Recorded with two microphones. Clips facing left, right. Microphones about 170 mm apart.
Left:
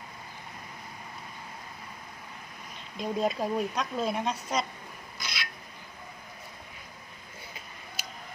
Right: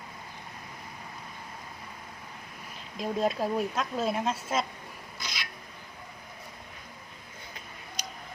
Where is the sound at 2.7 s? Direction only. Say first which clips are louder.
Even; centre (ahead or behind).